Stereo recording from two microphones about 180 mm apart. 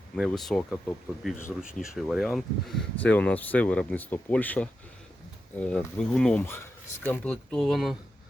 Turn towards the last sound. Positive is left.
turn(degrees=0)  # may be behind; listen again after turning